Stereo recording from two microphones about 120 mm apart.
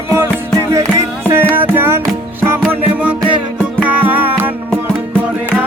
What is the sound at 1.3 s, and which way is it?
Music, 20° right (ahead or behind).